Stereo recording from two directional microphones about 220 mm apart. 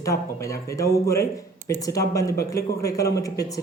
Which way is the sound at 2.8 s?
15° left (ahead or behind).